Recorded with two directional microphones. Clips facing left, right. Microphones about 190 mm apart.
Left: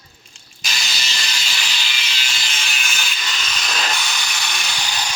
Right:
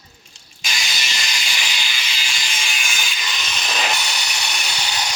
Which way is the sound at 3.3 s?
15° right (ahead or behind).